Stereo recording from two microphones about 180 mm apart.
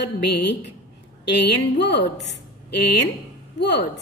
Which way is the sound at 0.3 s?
75° left (ahead or behind).